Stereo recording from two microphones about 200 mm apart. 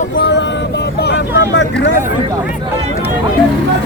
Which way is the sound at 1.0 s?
65° left (ahead or behind).